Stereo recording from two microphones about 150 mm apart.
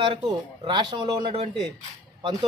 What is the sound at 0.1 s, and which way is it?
A man's voice, 30° right (ahead or behind).